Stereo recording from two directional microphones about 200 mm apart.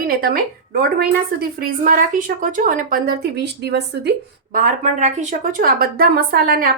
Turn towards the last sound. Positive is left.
turn(degrees=-45)  # may be behind; listen again after turning